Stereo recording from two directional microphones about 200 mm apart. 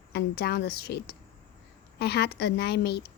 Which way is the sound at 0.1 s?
55° left (ahead or behind).